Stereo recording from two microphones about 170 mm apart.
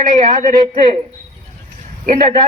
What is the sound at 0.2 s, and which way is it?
Speech, 50° right (ahead or behind).